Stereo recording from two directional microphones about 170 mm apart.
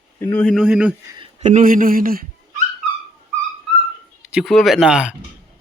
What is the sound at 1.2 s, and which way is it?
Speech, 40° right (ahead or behind).